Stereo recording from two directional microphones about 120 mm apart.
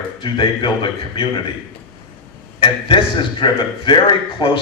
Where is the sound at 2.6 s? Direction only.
45° left (ahead or behind).